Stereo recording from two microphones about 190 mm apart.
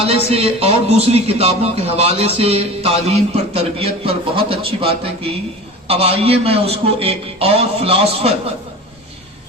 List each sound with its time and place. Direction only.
0.0 s a man's voice: 35° right (ahead or behind)